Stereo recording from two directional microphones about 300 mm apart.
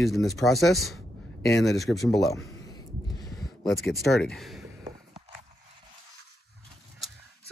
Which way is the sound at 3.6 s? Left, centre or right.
Centre.